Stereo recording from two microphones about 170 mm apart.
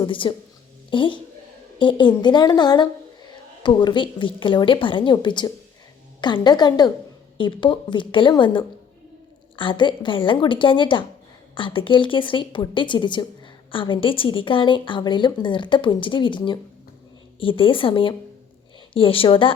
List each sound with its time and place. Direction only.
0.0 s a woman's voice: 30° left (ahead or behind)